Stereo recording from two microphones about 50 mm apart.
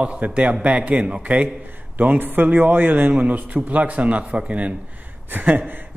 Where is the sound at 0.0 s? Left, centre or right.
Right.